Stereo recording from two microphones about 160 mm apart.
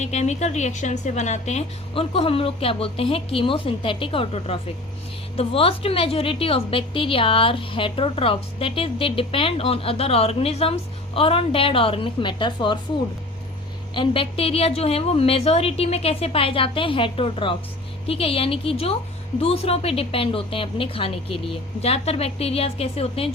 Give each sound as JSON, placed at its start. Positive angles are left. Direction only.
{"t": 0.0, "sound": "a woman's voice", "side_deg": 45}
{"t": 13.9, "sound": "a woman's voice", "side_deg": 30}